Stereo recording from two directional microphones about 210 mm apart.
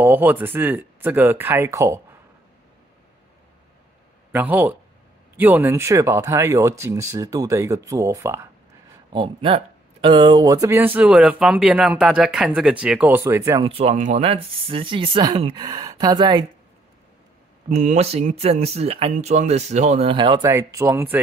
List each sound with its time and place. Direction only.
0.0 s speech: 10° right (ahead or behind)
4.3 s speech: 10° right (ahead or behind)
9.1 s speech: 25° right (ahead or behind)
13.7 s speech: 30° right (ahead or behind)
17.6 s speech: 35° right (ahead or behind); by 21.2 s 10° right (ahead or behind)